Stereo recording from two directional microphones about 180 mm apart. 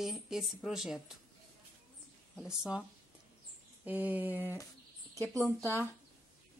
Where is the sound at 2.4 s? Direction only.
5° right (ahead or behind).